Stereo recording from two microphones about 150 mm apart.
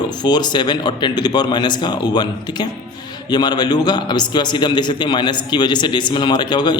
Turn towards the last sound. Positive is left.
turn(degrees=30)  # may be behind; listen again after turning